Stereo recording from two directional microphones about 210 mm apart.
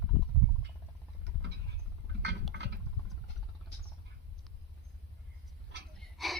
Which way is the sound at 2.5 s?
55° right (ahead or behind).